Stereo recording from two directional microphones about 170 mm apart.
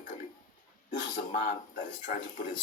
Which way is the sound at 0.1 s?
45° left (ahead or behind).